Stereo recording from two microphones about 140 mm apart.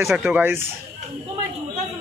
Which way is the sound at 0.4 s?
15° right (ahead or behind).